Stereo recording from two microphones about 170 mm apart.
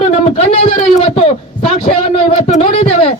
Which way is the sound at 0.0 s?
35° left (ahead or behind).